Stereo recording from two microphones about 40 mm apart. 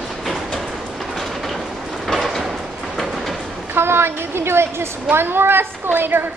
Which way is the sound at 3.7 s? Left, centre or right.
Right.